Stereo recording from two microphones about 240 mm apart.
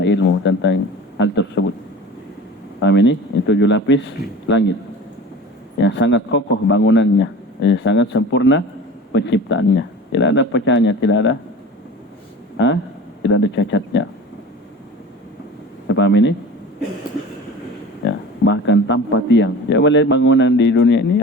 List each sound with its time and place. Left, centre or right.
0.0 s speech: left
2.8 s speech: left
5.8 s speech: left
12.5 s speech: left
15.9 s speech: left
18.0 s speech: left